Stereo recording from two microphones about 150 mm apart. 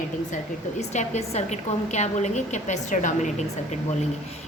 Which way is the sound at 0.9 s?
50° left (ahead or behind).